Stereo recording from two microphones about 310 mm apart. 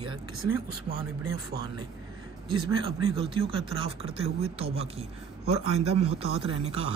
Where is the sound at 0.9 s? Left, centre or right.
Right.